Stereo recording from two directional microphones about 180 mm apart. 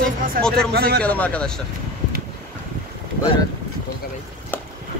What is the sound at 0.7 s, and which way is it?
Speech, 65° right (ahead or behind).